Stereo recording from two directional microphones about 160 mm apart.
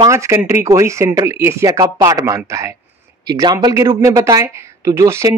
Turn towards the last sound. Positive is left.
turn(degrees=-20)  # may be behind; listen again after turning